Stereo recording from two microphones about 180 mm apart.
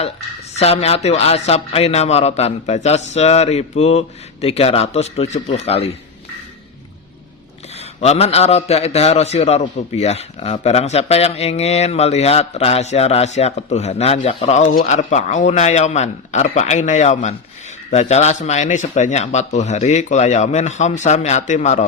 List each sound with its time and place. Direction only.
0.5 s a man's voice: 35° left (ahead or behind)
8.0 s a man's voice: 35° left (ahead or behind)